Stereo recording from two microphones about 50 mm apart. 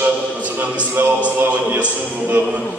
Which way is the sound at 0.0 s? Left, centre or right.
Right.